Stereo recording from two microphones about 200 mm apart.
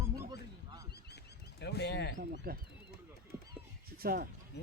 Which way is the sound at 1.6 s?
55° left (ahead or behind).